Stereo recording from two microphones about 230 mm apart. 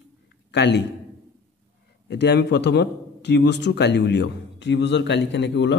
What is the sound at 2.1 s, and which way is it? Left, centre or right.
A man's voice, left.